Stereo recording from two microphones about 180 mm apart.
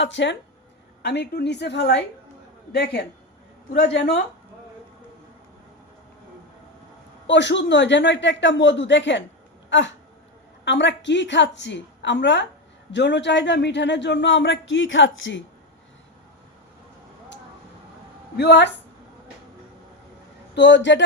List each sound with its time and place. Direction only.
0.0 s speech: 85° left
1.0 s a woman's voice: 70° left (ahead or behind)
7.3 s speech: 80° left
9.6 s a sound: 90° left
10.7 s speech: 85° left
18.3 s a woman's voice: 75° left (ahead or behind)
20.6 s speech: 80° left